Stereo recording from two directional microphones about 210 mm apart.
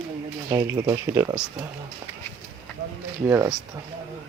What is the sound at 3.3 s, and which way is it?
Speech, 10° right (ahead or behind).